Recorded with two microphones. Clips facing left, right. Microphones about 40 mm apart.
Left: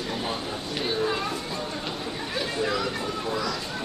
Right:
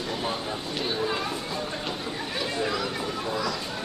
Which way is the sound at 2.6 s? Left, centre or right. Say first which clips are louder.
Left 1 dB; centre.